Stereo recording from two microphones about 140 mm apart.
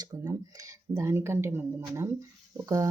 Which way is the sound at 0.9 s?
20° right (ahead or behind).